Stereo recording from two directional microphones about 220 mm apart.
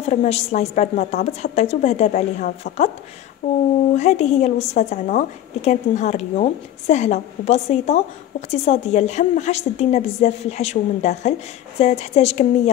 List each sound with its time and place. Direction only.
0.0 s a woman's voice: 30° left (ahead or behind)
3.9 s a woman's voice: 30° left (ahead or behind)